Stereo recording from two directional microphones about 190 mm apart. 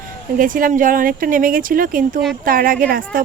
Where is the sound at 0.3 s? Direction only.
45° right (ahead or behind).